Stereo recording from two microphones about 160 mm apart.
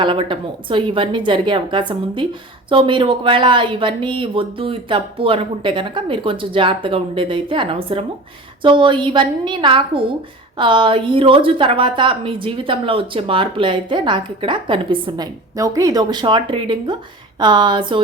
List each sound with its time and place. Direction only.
0.0 s a woman's voice: 30° right (ahead or behind)